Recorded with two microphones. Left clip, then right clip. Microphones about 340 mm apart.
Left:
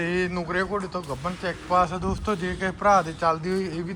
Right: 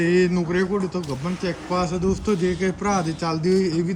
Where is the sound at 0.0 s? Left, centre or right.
Centre.